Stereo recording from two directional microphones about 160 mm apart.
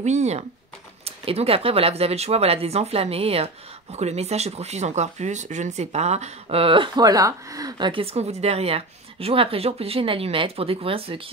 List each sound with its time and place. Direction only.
0.0 s speech: 45° right (ahead or behind)